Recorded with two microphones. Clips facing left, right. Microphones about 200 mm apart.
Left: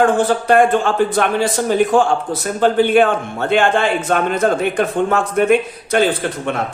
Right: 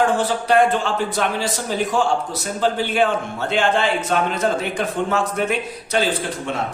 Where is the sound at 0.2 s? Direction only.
50° left (ahead or behind).